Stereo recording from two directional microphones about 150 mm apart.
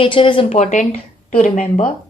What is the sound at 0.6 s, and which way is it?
Speech, 55° left (ahead or behind).